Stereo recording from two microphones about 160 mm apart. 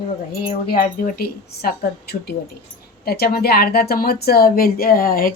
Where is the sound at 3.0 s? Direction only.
75° left (ahead or behind).